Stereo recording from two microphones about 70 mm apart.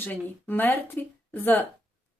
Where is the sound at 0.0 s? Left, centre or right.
Left.